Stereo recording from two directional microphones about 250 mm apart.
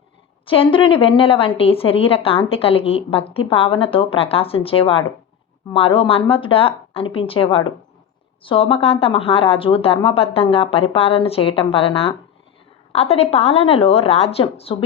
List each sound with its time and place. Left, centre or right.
0.4 s a woman's voice: left